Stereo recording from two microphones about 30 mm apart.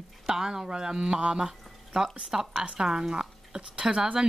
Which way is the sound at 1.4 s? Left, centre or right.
Right.